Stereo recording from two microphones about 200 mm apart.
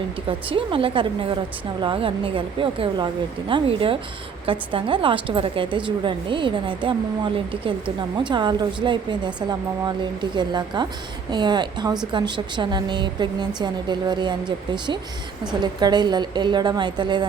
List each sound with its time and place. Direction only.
0.3 s a woman's voice: 25° right (ahead or behind)